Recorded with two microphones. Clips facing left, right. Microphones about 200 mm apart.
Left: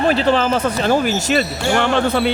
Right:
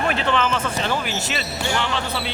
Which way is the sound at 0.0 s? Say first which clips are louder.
Left 6 dB; 35° left (ahead or behind).